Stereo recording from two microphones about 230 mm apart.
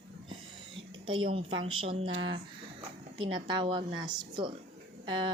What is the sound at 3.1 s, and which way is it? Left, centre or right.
Speech, right.